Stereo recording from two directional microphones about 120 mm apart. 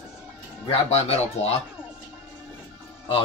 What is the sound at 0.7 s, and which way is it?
Speech, 60° left (ahead or behind).